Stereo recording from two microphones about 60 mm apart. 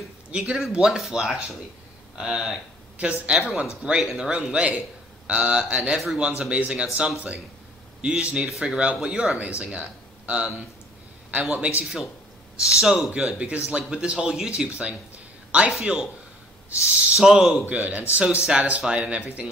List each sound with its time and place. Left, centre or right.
0.3 s speech: centre
3.0 s speech: right
11.6 s speech: centre
17.2 s speech: centre
17.6 s speech: right